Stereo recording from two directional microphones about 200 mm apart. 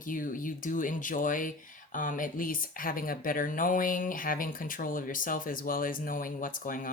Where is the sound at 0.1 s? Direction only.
40° left (ahead or behind).